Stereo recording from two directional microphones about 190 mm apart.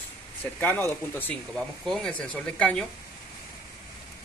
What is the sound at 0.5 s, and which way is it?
Speech, 10° left (ahead or behind).